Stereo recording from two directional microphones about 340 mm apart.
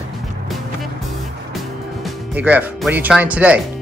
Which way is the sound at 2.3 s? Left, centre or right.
Centre.